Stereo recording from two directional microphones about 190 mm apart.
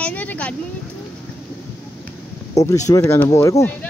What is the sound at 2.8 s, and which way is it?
Speech, 15° left (ahead or behind).